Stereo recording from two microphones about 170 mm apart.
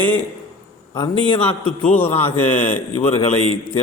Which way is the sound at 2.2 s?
45° left (ahead or behind).